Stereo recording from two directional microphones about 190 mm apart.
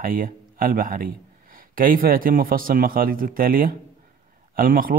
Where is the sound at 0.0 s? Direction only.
50° right (ahead or behind).